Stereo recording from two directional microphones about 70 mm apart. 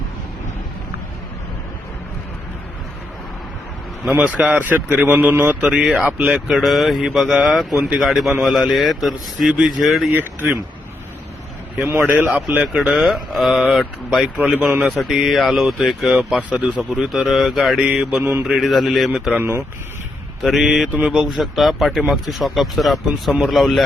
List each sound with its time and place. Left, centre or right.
4.2 s speech: centre
5.6 s speech: centre
6.5 s speech: centre
10.1 s speech: right
11.8 s a man's voice: right
12.9 s speech: centre
14.3 s speech: centre
15.0 s speech: centre
16.5 s speech: centre
18.2 s a man's voice: right
18.6 s speech: centre
19.4 s a man's voice: right
20.4 s speech: centre